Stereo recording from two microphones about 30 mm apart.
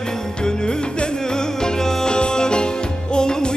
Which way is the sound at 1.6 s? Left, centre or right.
Left.